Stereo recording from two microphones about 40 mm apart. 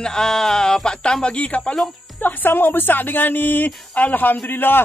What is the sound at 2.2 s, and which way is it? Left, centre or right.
Speech, left.